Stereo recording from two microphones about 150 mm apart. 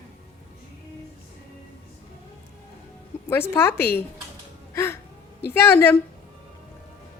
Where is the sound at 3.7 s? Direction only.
90° left.